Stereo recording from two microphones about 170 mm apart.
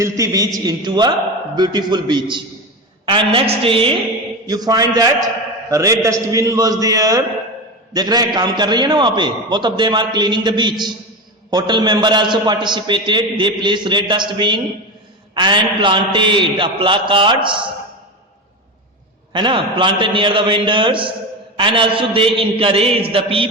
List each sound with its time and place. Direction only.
0.0 s a man's voice: 20° right (ahead or behind)
19.3 s a man's voice: 30° right (ahead or behind)